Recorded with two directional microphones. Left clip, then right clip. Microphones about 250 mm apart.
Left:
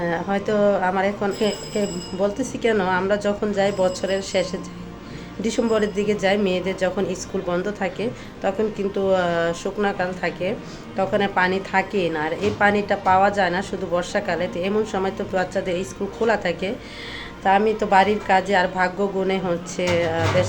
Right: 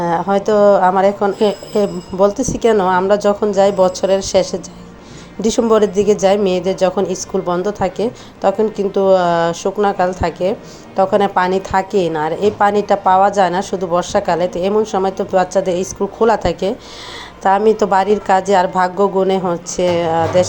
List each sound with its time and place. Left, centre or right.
0.0 s a woman's voice: centre